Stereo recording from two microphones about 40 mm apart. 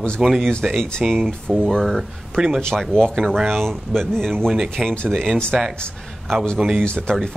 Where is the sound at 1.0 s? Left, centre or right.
Right.